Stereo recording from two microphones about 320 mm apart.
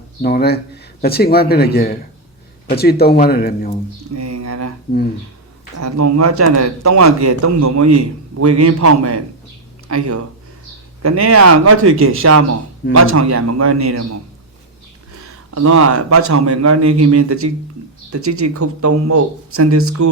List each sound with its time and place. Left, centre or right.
0.2 s speech: left
4.1 s a man's voice: right
4.9 s speech: left
5.8 s a man's voice: right
11.0 s a man's voice: right
15.2 s a man's voice: right